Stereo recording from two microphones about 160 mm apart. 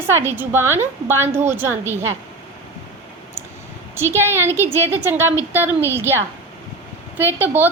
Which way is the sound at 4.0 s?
15° right (ahead or behind).